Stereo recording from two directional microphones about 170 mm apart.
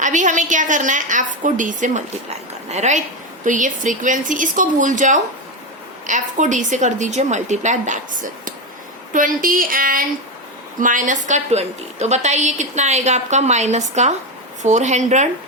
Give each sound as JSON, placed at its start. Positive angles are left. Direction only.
{"t": 0.0, "sound": "a woman's voice", "side_deg": -45}